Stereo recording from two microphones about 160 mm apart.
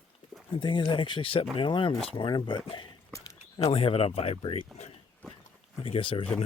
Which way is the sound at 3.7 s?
35° left (ahead or behind).